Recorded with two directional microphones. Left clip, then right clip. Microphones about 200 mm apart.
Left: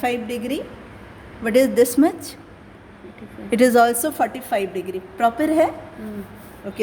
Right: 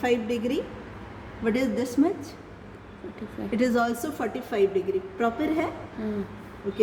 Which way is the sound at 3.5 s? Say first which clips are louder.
Left 10 dB; 55° left (ahead or behind).